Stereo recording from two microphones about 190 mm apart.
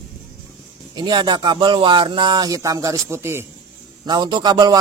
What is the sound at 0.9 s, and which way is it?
Speech, 25° right (ahead or behind).